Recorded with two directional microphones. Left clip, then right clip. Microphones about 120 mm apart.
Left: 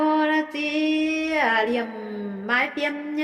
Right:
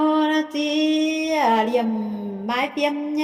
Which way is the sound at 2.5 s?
40° right (ahead or behind).